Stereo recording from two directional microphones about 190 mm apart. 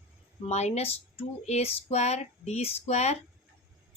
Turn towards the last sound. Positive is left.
turn(degrees=35)  # may be behind; listen again after turning